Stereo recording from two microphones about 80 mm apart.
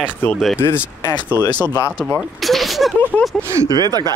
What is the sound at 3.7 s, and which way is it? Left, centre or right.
Speech, right.